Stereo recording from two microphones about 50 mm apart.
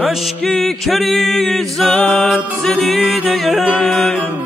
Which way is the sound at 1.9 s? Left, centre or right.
Left.